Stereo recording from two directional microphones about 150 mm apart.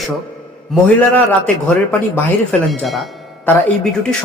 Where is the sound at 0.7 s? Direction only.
10° left (ahead or behind).